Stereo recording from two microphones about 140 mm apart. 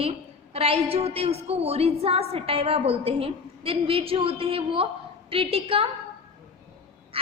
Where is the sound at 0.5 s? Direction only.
45° right (ahead or behind).